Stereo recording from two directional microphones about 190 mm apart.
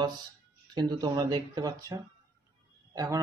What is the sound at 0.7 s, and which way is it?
Speech, 20° right (ahead or behind).